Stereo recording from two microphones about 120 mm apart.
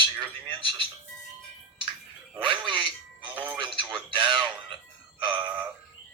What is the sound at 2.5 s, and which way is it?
Speech, 40° right (ahead or behind).